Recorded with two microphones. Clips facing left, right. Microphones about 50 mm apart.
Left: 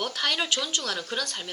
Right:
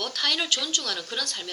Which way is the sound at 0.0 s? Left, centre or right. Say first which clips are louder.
Even; centre.